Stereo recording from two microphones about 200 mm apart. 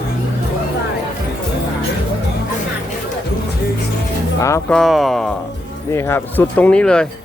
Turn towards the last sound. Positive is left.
turn(degrees=5)  # may be behind; listen again after turning